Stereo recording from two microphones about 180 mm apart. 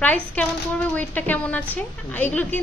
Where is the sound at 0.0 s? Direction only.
10° left (ahead or behind).